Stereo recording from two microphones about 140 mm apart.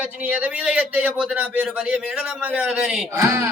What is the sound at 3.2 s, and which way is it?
Speech, 15° right (ahead or behind).